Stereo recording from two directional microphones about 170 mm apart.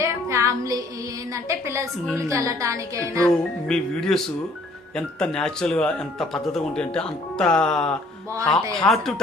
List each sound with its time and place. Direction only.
0.0 s music: 15° right (ahead or behind)
1.3 s a woman's voice: 15° right (ahead or behind)
3.2 s speech: 5° left (ahead or behind)